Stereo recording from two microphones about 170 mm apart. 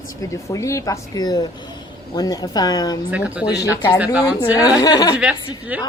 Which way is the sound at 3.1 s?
10° right (ahead or behind).